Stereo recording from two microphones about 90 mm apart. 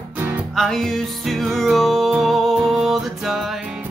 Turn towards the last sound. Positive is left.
turn(degrees=0)  # may be behind; listen again after turning